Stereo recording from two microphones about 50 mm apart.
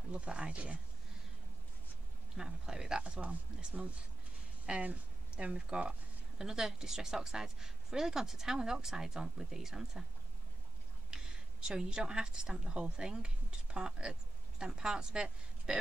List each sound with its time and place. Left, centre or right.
0.1 s speech: right
2.3 s speech: centre
3.0 s speech: right; by 10.0 s centre
11.1 s speech: centre